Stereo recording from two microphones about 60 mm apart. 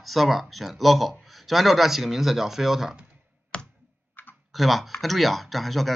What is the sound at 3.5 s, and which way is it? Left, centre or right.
Clicking, centre.